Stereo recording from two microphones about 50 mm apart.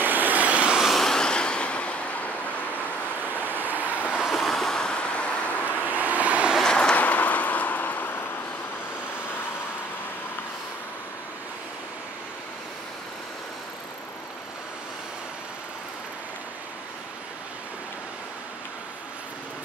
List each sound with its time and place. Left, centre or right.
0.0 s vehicle: right
0.8 s vehicle: centre; by 2.0 s left
3.3 s vehicle: right
4.3 s vehicle: centre
5.7 s vehicle: right
6.6 s vehicle: centre
7.0 s vehicle: left